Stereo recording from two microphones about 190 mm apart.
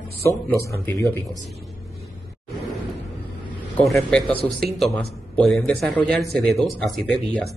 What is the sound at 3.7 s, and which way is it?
Speech, 5° left (ahead or behind).